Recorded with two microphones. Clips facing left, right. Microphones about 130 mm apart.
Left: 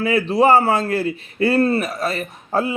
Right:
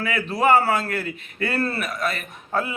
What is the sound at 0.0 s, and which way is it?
A man's voice, 30° left (ahead or behind).